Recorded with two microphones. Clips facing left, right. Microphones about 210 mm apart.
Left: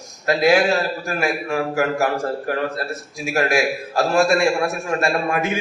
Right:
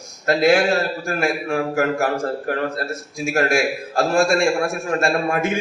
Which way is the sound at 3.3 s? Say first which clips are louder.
Even; 45° right (ahead or behind).